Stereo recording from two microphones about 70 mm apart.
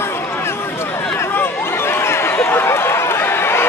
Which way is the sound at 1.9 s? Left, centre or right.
Left.